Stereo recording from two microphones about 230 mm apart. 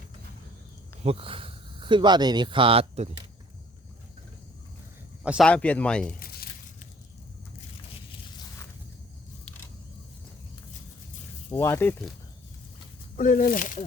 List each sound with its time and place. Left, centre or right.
1.0 s speech: right
5.2 s speech: centre
5.5 s speech: centre
6.1 s a sound: left
11.5 s speech: centre
13.1 s speech: left